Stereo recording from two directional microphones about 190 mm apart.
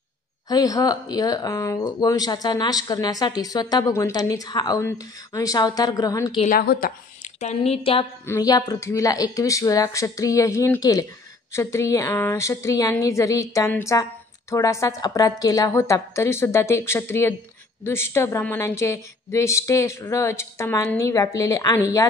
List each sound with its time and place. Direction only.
0.5 s speech: 20° left (ahead or behind)
6.4 s speech: 50° left (ahead or behind)
7.3 s a woman's voice: 35° left (ahead or behind)
8.3 s a woman's voice: 20° left (ahead or behind)